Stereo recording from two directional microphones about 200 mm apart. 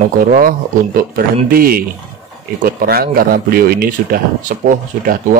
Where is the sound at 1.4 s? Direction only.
45° right (ahead or behind).